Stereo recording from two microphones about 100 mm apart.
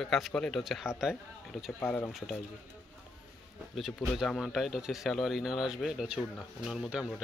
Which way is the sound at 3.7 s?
Centre (ahead or behind).